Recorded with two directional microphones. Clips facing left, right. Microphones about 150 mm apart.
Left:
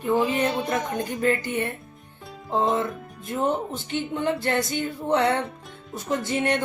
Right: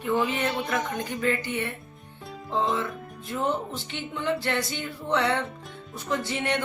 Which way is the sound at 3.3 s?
45° left (ahead or behind).